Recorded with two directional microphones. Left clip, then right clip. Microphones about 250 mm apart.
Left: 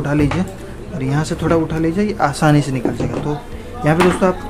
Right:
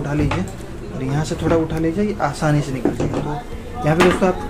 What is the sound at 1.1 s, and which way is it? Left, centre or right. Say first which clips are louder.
A woman's voice: left 2 dB; centre.